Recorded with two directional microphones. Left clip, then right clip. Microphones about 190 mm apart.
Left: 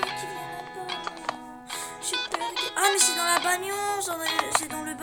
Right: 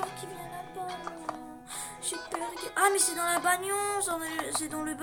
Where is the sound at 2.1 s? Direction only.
40° left (ahead or behind).